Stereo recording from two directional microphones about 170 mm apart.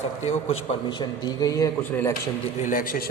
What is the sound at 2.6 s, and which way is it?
Speech, 50° left (ahead or behind).